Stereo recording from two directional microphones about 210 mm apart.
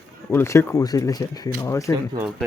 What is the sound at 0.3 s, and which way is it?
Speech, 10° left (ahead or behind).